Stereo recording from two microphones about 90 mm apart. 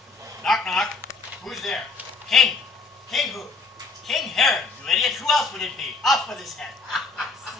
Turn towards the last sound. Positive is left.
turn(degrees=0)  # may be behind; listen again after turning